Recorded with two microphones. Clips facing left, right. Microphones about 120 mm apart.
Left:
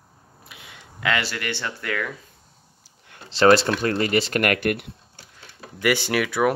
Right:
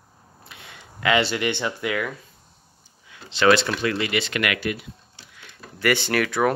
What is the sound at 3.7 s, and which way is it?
Speech, 40° left (ahead or behind).